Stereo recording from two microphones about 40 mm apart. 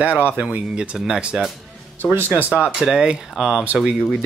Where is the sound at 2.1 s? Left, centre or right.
Right.